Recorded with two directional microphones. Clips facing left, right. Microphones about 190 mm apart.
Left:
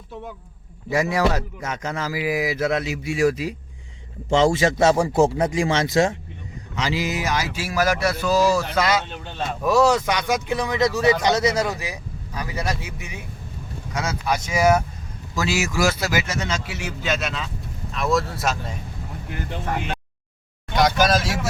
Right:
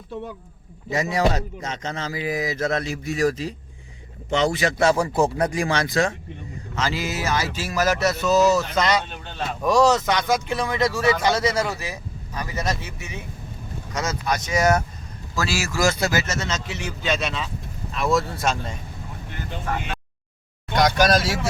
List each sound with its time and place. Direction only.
0.9 s speech: 20° right (ahead or behind)
2.6 s mantra: 45° right (ahead or behind)
2.8 s speech: 10° left (ahead or behind)
4.3 s a man's voice: 25° left (ahead or behind); by 14.8 s 5° left (ahead or behind)
15.4 s speech: 20° left (ahead or behind)
15.8 s speech: 5° left (ahead or behind)
20.7 s speech: 5° left (ahead or behind)